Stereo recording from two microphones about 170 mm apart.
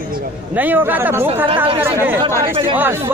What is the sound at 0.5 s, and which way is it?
Speech, 10° right (ahead or behind).